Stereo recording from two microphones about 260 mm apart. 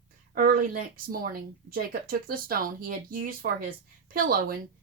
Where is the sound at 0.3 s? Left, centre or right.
Right.